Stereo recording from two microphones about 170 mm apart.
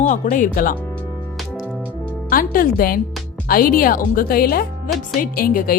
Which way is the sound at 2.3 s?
55° left (ahead or behind).